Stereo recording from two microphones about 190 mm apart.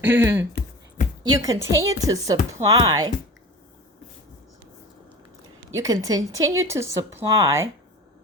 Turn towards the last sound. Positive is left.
turn(degrees=-15)  # may be behind; listen again after turning